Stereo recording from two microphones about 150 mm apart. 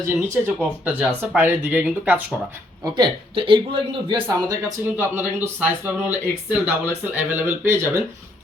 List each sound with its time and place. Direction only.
0.0 s speech: 15° right (ahead or behind)
2.8 s a man's voice: 30° right (ahead or behind)
4.9 s speech: 15° right (ahead or behind)